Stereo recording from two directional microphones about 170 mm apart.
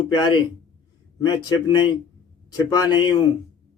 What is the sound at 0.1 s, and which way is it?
Speech, 25° left (ahead or behind).